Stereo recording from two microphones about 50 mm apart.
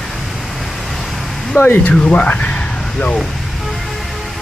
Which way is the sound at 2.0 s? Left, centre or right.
Left.